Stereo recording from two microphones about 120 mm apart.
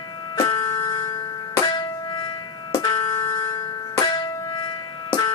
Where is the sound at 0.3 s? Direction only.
45° left (ahead or behind).